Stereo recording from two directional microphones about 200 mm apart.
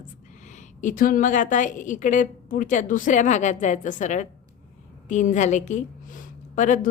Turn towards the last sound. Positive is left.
turn(degrees=40)  # may be behind; listen again after turning